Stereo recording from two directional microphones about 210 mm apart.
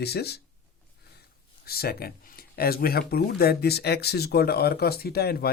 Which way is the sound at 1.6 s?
50° left (ahead or behind).